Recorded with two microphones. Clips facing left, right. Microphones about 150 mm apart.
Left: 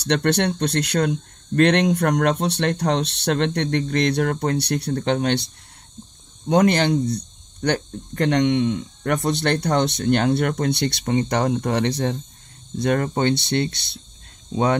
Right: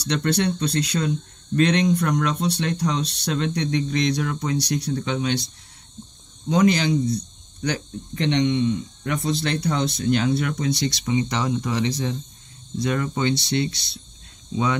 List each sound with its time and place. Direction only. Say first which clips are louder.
0.0 s speech: left 2 dB; 60° left (ahead or behind)
6.5 s speech: left 2 dB; 55° left (ahead or behind)